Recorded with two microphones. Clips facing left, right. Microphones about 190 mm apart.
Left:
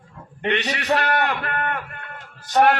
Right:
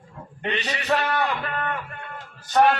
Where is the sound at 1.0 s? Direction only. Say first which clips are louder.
Left 2 dB; 70° left (ahead or behind).